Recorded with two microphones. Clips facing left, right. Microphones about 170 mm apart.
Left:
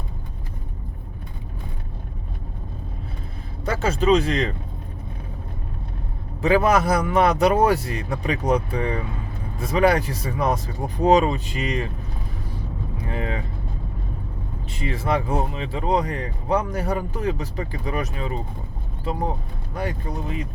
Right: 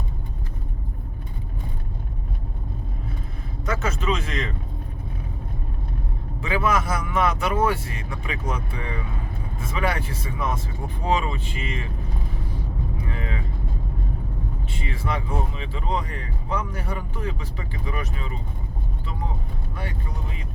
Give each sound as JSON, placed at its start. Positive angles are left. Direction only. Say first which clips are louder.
{"t": 3.7, "sound": "speech", "louder": "left 7 dB", "side_deg": 30}
{"t": 6.4, "sound": "speech", "louder": "left 6 dB", "side_deg": 40}
{"t": 13.1, "sound": "speech", "louder": "left 9 dB", "side_deg": 35}
{"t": 14.7, "sound": "speech", "louder": "left 7 dB", "side_deg": 35}
{"t": 19.7, "sound": "speech", "louder": "left 8 dB", "side_deg": 40}